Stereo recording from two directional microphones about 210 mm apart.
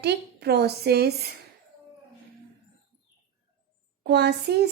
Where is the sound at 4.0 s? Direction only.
50° right (ahead or behind).